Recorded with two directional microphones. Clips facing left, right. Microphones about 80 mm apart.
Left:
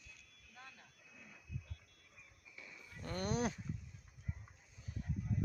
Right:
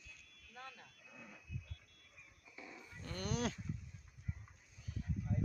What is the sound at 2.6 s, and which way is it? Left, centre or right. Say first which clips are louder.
Wild animals: right 3 dB; right.